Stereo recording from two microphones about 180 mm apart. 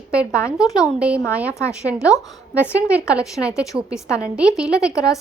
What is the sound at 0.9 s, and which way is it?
Speech, 5° right (ahead or behind).